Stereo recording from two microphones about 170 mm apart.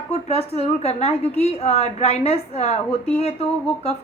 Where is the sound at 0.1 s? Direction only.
35° left (ahead or behind).